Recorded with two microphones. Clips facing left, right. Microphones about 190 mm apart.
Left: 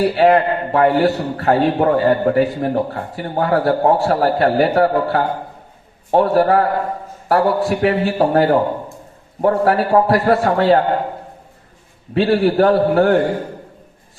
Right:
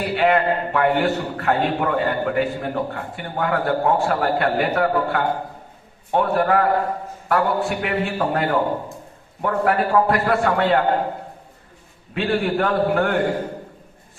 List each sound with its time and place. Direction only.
0.0 s a man's voice: 35° left (ahead or behind)
12.1 s a man's voice: 35° left (ahead or behind)